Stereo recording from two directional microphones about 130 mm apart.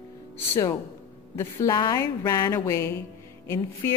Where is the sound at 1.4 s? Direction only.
30° left (ahead or behind).